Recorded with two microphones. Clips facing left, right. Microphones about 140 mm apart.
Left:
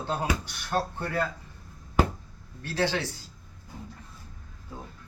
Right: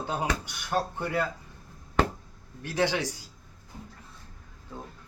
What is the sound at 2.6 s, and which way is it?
Speech, 15° right (ahead or behind).